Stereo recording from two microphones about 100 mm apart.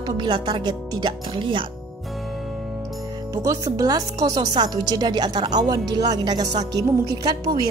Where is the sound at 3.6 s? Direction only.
35° right (ahead or behind).